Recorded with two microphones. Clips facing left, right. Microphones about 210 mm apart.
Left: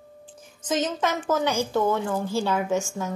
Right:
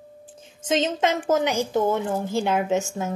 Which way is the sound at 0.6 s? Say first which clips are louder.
Right 3 dB; 25° right (ahead or behind).